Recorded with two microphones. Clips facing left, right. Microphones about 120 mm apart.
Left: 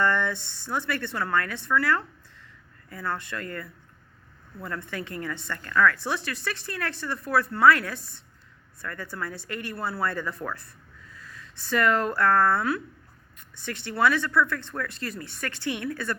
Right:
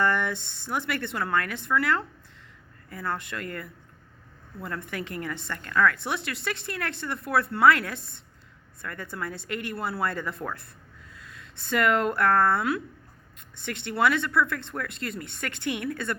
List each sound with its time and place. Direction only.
0.0 s a woman's voice: 20° right (ahead or behind)
4.8 s a woman's voice: 25° left (ahead or behind)
5.2 s a woman's voice: 25° right (ahead or behind)
11.6 s a woman's voice: 25° right (ahead or behind)
13.7 s a woman's voice: 20° right (ahead or behind)